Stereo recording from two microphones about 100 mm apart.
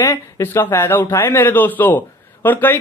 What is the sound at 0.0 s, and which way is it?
A man's voice, 25° left (ahead or behind).